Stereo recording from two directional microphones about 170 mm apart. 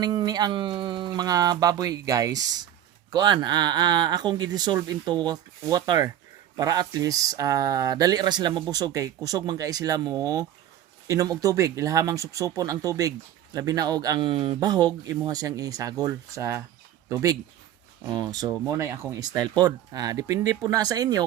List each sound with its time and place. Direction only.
0.0 s speech: 25° right (ahead or behind)